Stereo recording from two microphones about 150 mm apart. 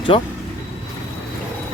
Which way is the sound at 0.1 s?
35° left (ahead or behind).